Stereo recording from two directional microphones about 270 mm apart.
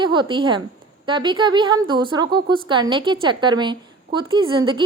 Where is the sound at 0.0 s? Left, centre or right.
Centre.